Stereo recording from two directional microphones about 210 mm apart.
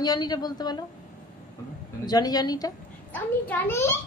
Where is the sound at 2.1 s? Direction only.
20° left (ahead or behind).